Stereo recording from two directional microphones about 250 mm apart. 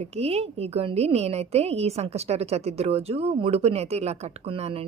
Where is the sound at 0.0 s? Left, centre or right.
Right.